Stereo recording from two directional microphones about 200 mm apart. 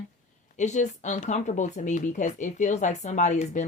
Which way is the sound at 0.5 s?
35° left (ahead or behind).